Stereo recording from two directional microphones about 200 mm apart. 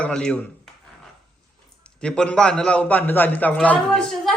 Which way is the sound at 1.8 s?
5° left (ahead or behind).